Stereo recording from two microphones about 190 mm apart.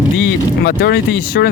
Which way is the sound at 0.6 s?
55° left (ahead or behind).